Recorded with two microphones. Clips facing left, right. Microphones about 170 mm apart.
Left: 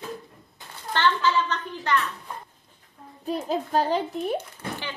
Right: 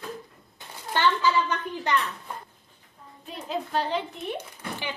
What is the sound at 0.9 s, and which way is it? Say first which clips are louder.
A woman's voice: even; 10° right (ahead or behind).